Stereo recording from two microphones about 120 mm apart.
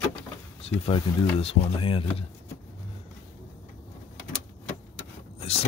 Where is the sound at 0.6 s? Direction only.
55° left (ahead or behind).